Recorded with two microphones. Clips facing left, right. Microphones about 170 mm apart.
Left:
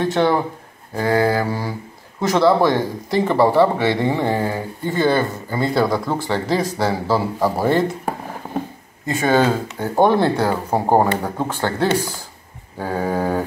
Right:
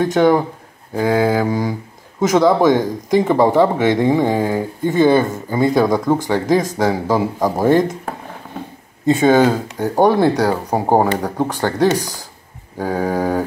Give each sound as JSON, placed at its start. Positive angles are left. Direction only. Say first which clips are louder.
{"t": 0.0, "sound": "speech", "louder": "right 4 dB", "side_deg": -15}
{"t": 9.0, "sound": "speech", "louder": "right 5 dB", "side_deg": -15}